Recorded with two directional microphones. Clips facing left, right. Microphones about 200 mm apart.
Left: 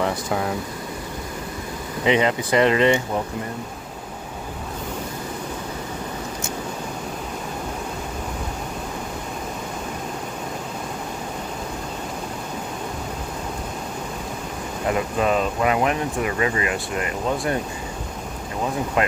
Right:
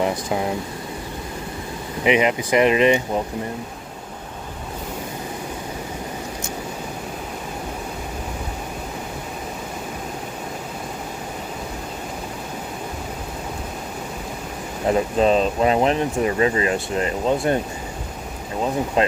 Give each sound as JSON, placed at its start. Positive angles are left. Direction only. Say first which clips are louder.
{"t": 0.0, "sound": "speech", "louder": "right 1 dB", "side_deg": -20}
{"t": 2.0, "sound": "speech", "louder": "right 1 dB", "side_deg": -15}
{"t": 14.8, "sound": "speech", "louder": "right 4 dB", "side_deg": -30}
{"t": 19.0, "sound": "speech", "louder": "right 2 dB", "side_deg": -30}